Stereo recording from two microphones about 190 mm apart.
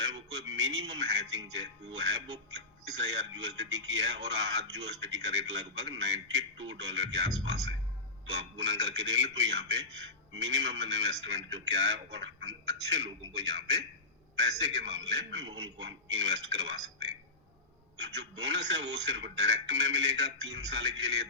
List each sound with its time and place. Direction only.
0.0 s a man's voice: 75° right (ahead or behind)